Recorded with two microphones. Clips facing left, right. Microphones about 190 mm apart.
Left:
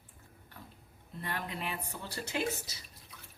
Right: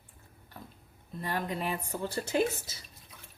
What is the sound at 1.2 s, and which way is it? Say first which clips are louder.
Speech: right 6 dB; 45° right (ahead or behind).